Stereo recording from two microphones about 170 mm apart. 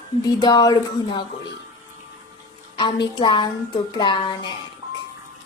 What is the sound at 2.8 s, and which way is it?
Speech, 25° left (ahead or behind).